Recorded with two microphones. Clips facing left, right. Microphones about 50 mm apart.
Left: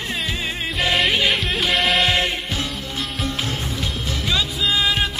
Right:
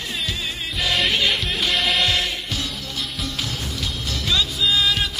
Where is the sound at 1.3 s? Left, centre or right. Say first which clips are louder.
Left 2 dB; centre.